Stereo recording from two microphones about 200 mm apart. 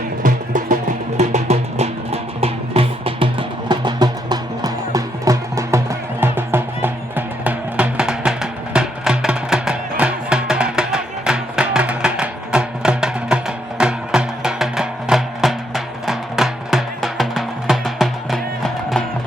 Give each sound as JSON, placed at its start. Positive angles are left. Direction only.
{"t": 0.2, "sound": "music", "side_deg": -40}